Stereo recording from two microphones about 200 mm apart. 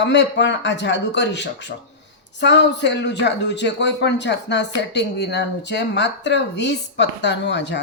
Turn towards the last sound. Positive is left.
turn(degrees=60)  # may be behind; listen again after turning